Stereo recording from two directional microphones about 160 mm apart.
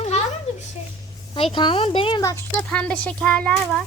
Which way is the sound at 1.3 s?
30° left (ahead or behind).